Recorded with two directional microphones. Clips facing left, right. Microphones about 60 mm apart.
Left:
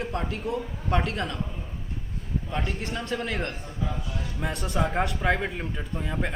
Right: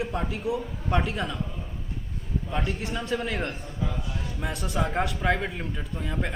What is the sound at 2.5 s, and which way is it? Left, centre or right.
A man's voice, centre.